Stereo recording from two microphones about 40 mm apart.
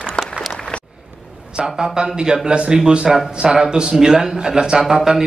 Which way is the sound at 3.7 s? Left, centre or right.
Right.